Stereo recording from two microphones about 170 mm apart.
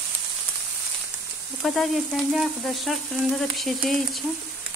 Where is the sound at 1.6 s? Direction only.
Centre (ahead or behind).